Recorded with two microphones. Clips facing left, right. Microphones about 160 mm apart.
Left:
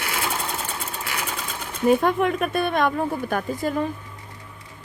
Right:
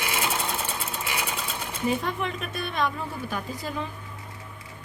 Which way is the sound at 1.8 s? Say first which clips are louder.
Left 9 dB; 55° left (ahead or behind).